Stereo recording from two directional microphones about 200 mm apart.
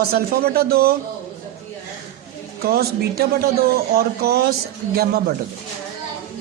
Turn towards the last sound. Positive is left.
turn(degrees=-50)  # may be behind; listen again after turning